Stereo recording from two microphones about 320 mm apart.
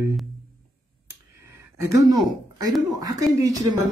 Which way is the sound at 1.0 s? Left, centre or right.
Centre.